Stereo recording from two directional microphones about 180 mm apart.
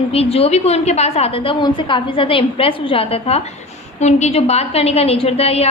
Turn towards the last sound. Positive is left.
turn(degrees=35)  # may be behind; listen again after turning